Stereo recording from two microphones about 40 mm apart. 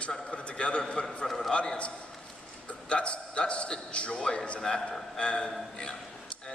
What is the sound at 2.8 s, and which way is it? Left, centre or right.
A man's voice, left.